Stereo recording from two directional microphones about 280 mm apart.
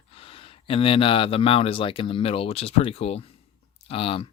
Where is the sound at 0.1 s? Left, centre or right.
Centre.